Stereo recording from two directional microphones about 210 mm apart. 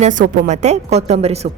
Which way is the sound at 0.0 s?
35° right (ahead or behind).